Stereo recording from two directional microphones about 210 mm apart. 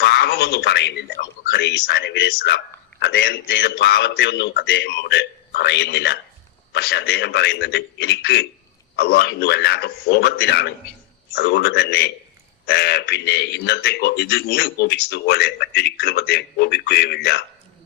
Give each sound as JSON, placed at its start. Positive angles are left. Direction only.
{"t": 0.0, "sound": "a man's voice", "side_deg": 50}